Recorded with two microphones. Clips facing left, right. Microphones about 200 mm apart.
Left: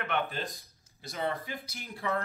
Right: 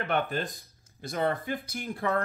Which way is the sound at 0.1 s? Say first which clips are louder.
Right 3 dB; 40° right (ahead or behind).